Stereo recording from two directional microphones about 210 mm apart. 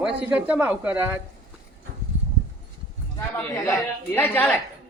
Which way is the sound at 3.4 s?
10° left (ahead or behind).